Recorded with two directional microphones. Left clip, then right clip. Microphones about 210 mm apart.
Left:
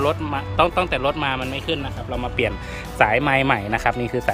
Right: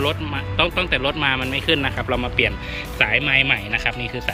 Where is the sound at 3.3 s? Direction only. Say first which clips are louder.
Right 1 dB; 25° left (ahead or behind).